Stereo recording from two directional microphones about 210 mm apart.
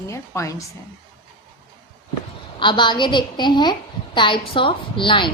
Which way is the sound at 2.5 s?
20° left (ahead or behind).